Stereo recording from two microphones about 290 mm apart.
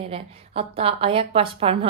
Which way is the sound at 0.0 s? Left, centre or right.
Centre.